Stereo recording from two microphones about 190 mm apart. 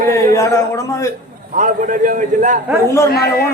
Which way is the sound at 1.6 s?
45° right (ahead or behind).